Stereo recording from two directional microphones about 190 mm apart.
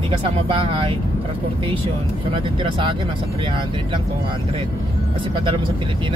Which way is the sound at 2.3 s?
25° right (ahead or behind).